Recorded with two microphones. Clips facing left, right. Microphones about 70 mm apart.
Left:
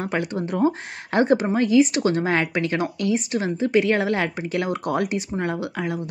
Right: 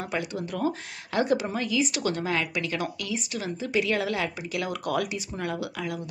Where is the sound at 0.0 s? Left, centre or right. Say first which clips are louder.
Left 6 dB; left.